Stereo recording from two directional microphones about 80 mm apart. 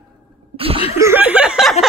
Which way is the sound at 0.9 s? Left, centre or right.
Right.